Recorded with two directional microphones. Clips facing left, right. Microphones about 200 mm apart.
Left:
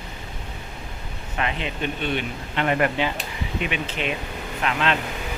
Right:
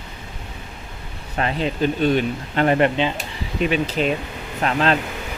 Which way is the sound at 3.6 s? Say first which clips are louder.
Right 9 dB; 40° right (ahead or behind).